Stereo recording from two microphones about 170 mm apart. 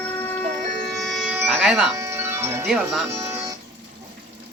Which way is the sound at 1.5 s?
Centre (ahead or behind).